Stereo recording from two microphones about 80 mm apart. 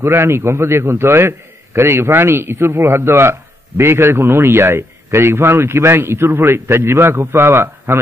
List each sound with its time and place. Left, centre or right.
0.0 s a man's voice: right